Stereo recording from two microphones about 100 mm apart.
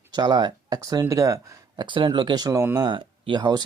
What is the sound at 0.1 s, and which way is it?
Speech, 45° right (ahead or behind).